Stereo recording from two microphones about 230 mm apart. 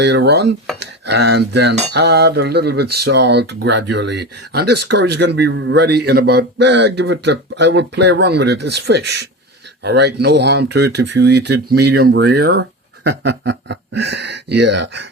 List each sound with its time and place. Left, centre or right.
0.0 s cutlery: right